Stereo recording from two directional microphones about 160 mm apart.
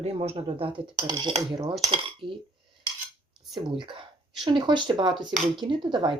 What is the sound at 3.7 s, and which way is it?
Speech, 30° right (ahead or behind).